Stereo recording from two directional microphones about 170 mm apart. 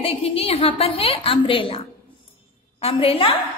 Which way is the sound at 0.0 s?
35° left (ahead or behind).